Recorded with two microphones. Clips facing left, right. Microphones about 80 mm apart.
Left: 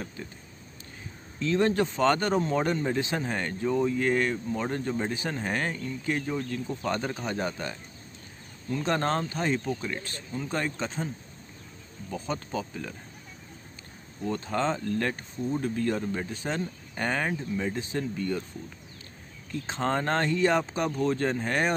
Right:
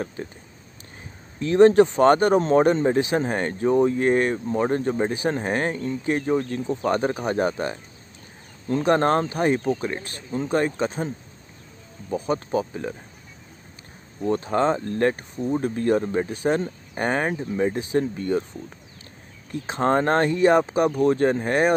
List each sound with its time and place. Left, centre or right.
0.2 s speech: right
1.5 s speech: right
8.9 s speech: right
10.8 s speech: centre
12.3 s speech: right
14.2 s speech: right
15.3 s speech: centre
15.6 s speech: right
19.6 s speech: centre